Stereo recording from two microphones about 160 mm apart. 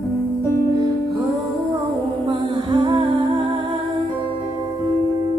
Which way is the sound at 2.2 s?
25° right (ahead or behind).